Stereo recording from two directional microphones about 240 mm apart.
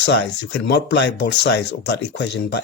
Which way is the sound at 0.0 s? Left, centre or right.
Left.